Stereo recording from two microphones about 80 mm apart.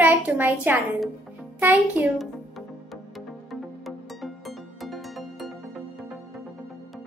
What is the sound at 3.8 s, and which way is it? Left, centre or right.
Music, centre.